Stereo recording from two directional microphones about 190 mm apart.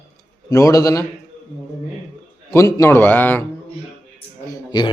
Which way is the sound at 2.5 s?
15° left (ahead or behind).